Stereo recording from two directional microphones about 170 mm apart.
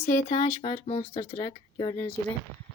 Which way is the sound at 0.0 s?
45° left (ahead or behind).